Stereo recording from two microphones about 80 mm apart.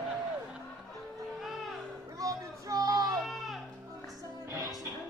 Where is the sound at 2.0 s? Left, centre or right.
Right.